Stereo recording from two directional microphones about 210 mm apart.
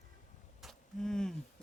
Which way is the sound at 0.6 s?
Centre (ahead or behind).